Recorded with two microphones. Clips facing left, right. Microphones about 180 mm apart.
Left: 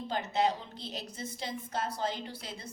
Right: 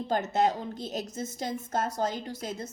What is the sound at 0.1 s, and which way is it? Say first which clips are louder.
A woman's voice: right 4 dB; 45° right (ahead or behind).